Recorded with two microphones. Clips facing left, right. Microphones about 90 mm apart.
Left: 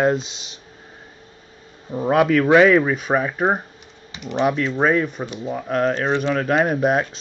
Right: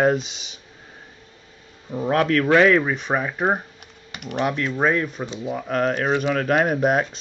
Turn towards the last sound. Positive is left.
turn(degrees=0)  # may be behind; listen again after turning